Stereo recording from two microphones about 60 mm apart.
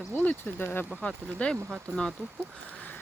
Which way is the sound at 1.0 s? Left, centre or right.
Centre.